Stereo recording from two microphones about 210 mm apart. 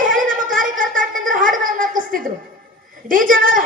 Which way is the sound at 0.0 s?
40° right (ahead or behind).